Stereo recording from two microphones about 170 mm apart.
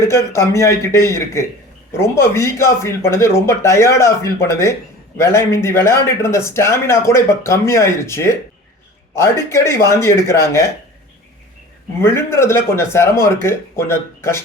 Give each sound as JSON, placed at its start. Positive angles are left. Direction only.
{"t": 0.0, "sound": "speech", "side_deg": 15}
{"t": 12.0, "sound": "speech", "side_deg": 15}